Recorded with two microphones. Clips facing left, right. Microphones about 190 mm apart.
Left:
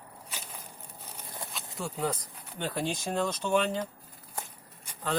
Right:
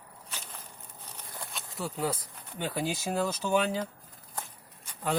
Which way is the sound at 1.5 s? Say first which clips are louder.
Right 1 dB; centre (ahead or behind).